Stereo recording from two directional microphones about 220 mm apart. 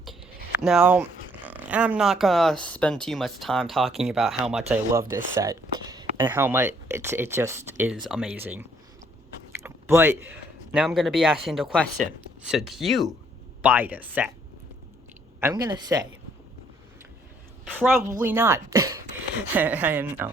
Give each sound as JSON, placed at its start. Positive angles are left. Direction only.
{"t": 0.6, "sound": "speech", "side_deg": 0}
{"t": 9.6, "sound": "biting", "side_deg": -10}
{"t": 10.7, "sound": "speech", "side_deg": -5}
{"t": 15.4, "sound": "speech", "side_deg": -15}
{"t": 18.2, "sound": "speech", "side_deg": -10}